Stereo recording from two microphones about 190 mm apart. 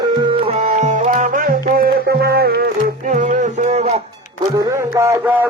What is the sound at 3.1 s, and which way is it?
Music, 40° right (ahead or behind).